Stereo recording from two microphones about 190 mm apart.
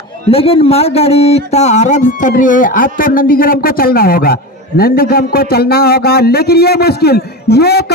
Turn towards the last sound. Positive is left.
turn(degrees=60)  # may be behind; listen again after turning